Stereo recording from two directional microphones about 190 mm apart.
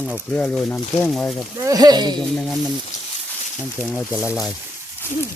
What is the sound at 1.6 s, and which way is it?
Speech, 20° right (ahead or behind).